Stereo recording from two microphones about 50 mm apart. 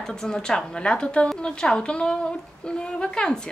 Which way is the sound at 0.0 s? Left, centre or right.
Centre.